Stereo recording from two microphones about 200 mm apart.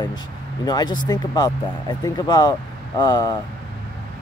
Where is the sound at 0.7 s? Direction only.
20° left (ahead or behind).